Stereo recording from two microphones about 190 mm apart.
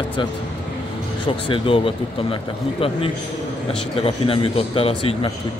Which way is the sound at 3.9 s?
30° left (ahead or behind).